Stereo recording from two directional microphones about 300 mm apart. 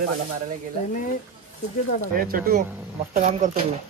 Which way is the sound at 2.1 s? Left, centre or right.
Right.